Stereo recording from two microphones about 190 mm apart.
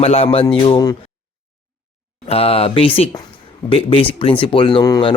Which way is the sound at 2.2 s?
30° left (ahead or behind).